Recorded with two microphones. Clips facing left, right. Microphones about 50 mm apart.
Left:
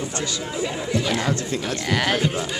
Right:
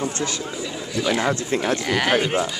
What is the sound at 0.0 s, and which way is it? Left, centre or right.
Speech, right.